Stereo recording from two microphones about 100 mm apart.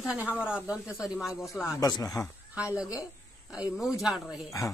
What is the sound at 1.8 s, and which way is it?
Speech, 35° left (ahead or behind).